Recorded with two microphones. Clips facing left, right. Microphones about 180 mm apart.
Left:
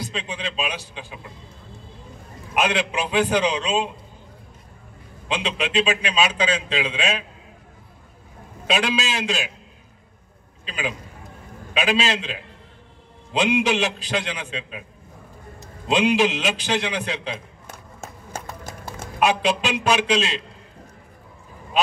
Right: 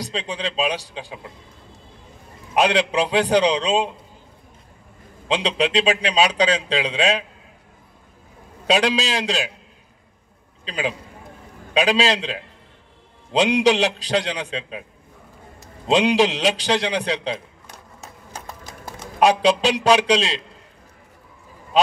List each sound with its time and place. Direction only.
0.0 s a man's voice: 35° right (ahead or behind)
2.5 s a man's voice: 35° right (ahead or behind)
5.3 s a man's voice: 35° right (ahead or behind)
8.6 s a man's voice: 35° right (ahead or behind)
10.6 s a man's voice: 35° right (ahead or behind)
15.9 s a man's voice: 35° right (ahead or behind)
18.0 s clip-clop: 50° left (ahead or behind)
19.1 s a man's voice: 35° right (ahead or behind)